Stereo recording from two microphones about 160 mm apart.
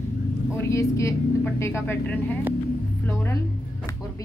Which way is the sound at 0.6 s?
20° left (ahead or behind).